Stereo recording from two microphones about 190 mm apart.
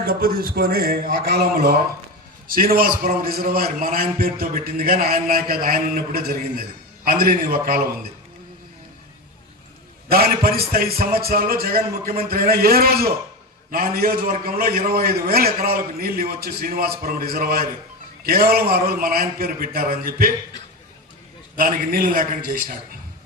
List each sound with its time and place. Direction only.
0.0 s a man's voice: 50° right (ahead or behind)
10.1 s a man's voice: 50° right (ahead or behind)
21.5 s a man's voice: 50° right (ahead or behind)